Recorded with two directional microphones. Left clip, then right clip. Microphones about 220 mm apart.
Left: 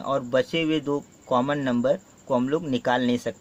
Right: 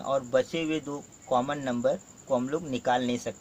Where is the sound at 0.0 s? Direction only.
40° left (ahead or behind).